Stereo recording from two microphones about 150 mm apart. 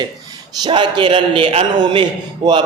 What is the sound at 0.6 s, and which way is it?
A man's voice, 30° right (ahead or behind).